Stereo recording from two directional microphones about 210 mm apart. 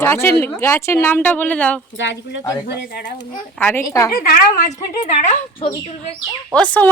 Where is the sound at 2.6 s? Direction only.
55° left (ahead or behind).